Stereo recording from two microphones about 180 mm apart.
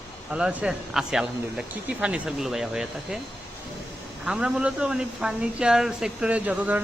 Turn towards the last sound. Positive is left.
turn(degrees=-10)  # may be behind; listen again after turning